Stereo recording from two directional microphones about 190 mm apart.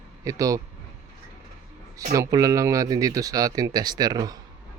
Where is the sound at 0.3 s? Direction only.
15° right (ahead or behind).